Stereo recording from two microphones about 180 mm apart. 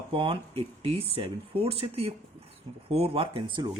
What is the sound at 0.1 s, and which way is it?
Speech, 30° right (ahead or behind).